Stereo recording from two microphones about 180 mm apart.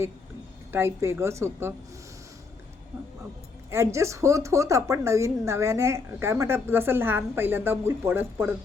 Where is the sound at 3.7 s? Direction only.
15° right (ahead or behind).